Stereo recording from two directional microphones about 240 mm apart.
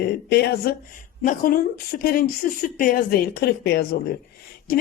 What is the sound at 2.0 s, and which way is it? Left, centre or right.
A woman's voice, left.